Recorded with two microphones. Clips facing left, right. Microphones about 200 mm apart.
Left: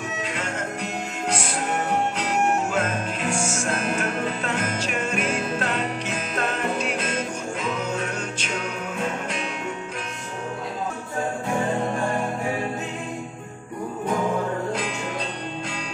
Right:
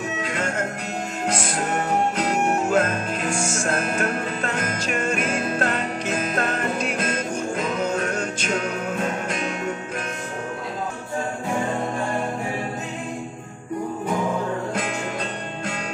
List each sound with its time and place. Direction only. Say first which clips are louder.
0.2 s music: right 3 dB; 45° right (ahead or behind)
2.1 s music: right 1 dB; 40° right (ahead or behind)